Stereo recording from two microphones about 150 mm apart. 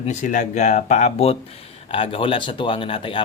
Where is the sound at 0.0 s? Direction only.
50° left (ahead or behind).